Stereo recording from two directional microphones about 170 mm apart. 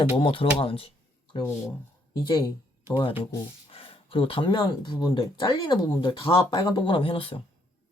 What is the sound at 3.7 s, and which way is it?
Speech, 30° left (ahead or behind).